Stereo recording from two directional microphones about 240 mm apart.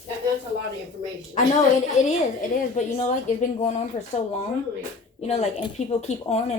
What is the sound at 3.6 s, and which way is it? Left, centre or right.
Speech, left.